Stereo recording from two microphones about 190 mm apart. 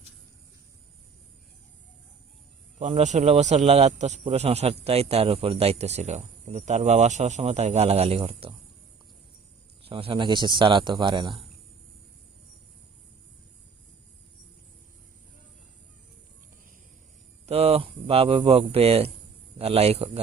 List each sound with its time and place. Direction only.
2.7 s a man's voice: 40° right (ahead or behind)
9.8 s a man's voice: 30° right (ahead or behind)
17.4 s a man's voice: 30° right (ahead or behind)